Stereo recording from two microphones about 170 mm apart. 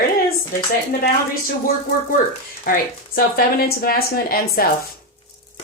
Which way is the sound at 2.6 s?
55° left (ahead or behind).